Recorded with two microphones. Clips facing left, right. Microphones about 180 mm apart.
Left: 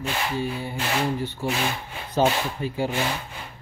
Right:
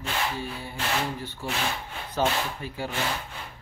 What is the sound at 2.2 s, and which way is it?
Speech, 20° left (ahead or behind).